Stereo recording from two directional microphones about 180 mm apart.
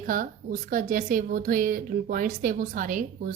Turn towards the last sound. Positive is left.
turn(degrees=-50)  # may be behind; listen again after turning